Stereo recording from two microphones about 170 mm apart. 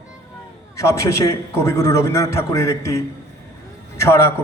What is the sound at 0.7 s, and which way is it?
A man's voice, 15° left (ahead or behind).